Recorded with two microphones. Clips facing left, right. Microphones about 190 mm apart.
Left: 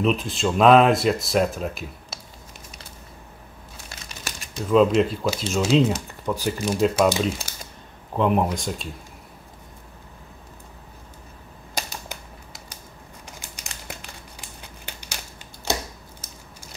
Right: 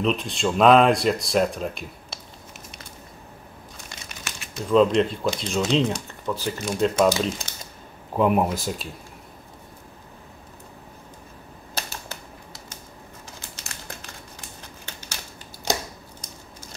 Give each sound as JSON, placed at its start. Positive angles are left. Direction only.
{"t": 0.0, "sound": "speech", "side_deg": 0}
{"t": 4.3, "sound": "a sound", "side_deg": 35}
{"t": 4.6, "sound": "speech", "side_deg": 5}
{"t": 8.2, "sound": "speech", "side_deg": -5}
{"t": 11.7, "sound": "typewriter", "side_deg": 15}
{"t": 13.4, "sound": "crumpling", "side_deg": 15}
{"t": 14.9, "sound": "a sound", "side_deg": 15}